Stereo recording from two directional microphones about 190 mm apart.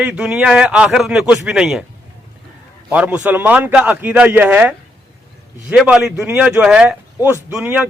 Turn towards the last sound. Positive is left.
turn(degrees=-5)  # may be behind; listen again after turning